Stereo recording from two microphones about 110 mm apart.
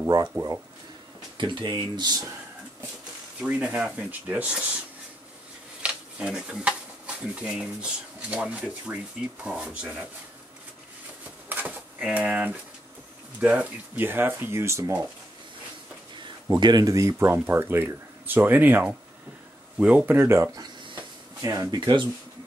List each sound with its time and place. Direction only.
1.4 s speech: 45° right (ahead or behind)
3.3 s speech: 10° right (ahead or behind)
5.8 s a sound: 10° right (ahead or behind)
7.3 s speech: 10° right (ahead or behind)
11.4 s a sound: 15° right (ahead or behind)
13.4 s speech: 15° right (ahead or behind)
16.5 s speech: 40° right (ahead or behind); by 20.2 s 10° right (ahead or behind)
20.2 s speech: 25° right (ahead or behind)
21.4 s speech: 35° right (ahead or behind)